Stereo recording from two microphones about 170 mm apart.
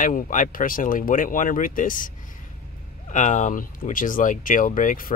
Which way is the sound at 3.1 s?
45° left (ahead or behind).